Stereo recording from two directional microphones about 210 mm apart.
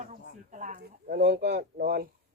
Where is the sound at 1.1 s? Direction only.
50° right (ahead or behind).